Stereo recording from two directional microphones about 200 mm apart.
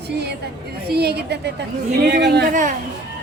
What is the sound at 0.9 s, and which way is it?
A woman's voice, 55° right (ahead or behind).